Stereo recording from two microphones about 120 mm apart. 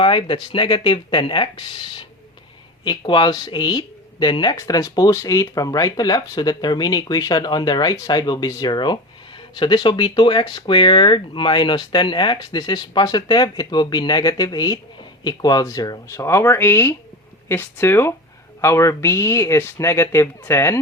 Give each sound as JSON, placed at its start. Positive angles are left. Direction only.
{"t": 0.0, "sound": "speech", "side_deg": 45}
{"t": 4.5, "sound": "speech", "side_deg": 30}